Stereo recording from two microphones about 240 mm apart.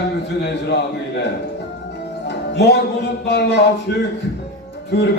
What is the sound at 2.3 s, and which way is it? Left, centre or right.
Music, left.